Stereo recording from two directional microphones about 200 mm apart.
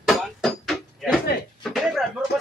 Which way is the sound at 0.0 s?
Centre (ahead or behind).